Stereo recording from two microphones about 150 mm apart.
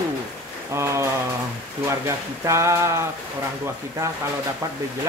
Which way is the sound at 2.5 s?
20° right (ahead or behind).